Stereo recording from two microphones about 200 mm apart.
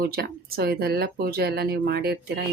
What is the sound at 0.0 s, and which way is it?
Speech, 50° right (ahead or behind).